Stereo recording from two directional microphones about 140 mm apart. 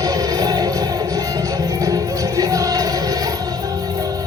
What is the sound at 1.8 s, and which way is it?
Music, 25° right (ahead or behind).